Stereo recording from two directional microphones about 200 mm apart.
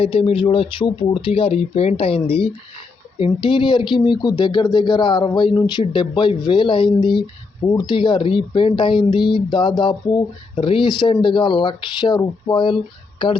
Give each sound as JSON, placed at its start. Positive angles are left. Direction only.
{"t": 0.0, "sound": "speech", "side_deg": 30}